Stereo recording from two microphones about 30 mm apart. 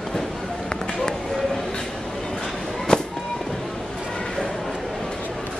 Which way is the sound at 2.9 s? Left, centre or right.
Left.